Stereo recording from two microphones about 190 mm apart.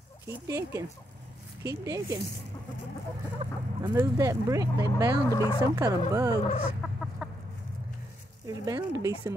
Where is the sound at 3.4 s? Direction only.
30° right (ahead or behind).